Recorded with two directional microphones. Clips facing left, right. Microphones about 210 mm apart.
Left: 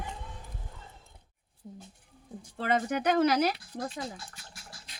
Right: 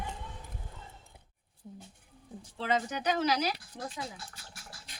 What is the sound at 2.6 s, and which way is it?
Speech, 55° left (ahead or behind).